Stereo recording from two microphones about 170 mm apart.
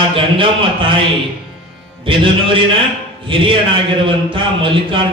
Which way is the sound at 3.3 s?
30° right (ahead or behind).